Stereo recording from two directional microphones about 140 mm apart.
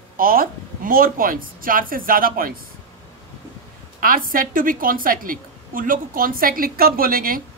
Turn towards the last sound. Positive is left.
turn(degrees=-90)